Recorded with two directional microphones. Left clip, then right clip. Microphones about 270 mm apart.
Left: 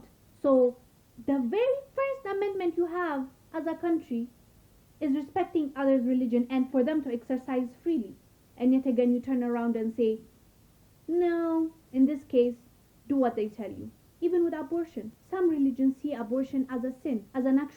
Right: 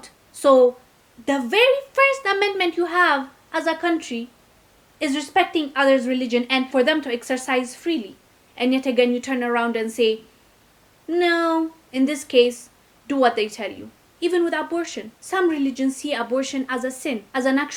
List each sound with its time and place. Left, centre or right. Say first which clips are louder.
0.0 s a sound: right 10 dB; centre
0.5 s a woman's voice: right 9 dB; right
1.2 s a woman's voice: right 10 dB; centre